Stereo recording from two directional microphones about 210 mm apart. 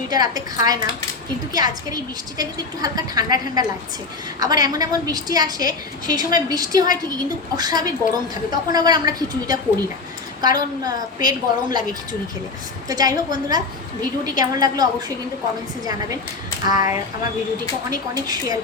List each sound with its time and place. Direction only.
0.1 s a woman's voice: 20° right (ahead or behind)
12.9 s a woman's voice: 20° right (ahead or behind)
16.6 s a woman's voice: 15° right (ahead or behind)